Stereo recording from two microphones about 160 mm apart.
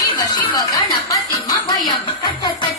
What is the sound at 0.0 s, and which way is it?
Music, 25° left (ahead or behind).